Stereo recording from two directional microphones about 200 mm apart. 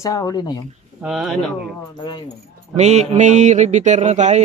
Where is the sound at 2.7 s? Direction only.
35° right (ahead or behind).